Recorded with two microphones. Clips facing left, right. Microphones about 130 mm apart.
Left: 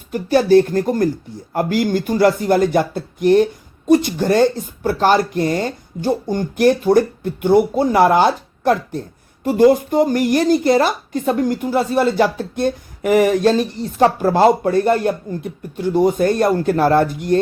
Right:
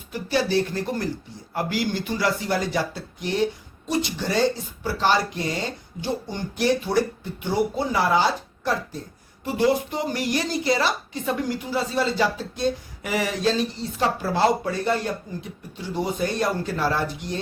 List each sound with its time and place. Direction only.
0.1 s speech: 50° left (ahead or behind)